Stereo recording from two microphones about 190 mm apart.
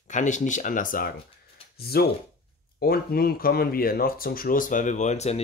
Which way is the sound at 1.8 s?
55° left (ahead or behind).